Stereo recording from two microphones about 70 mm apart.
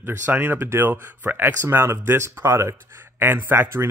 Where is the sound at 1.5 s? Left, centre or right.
Right.